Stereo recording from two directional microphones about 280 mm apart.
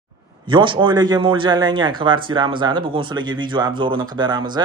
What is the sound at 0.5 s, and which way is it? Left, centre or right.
A man's voice, centre.